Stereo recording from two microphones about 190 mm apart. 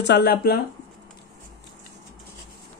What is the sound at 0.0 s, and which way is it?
Speech, 60° left (ahead or behind).